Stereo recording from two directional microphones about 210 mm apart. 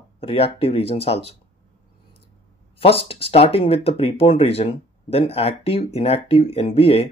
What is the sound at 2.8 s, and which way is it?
Speech, 25° left (ahead or behind).